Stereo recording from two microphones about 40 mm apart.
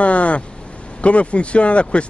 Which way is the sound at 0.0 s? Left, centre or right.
Left.